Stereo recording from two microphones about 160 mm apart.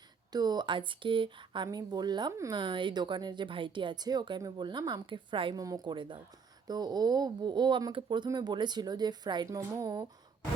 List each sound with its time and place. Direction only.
0.3 s speech: 25° right (ahead or behind)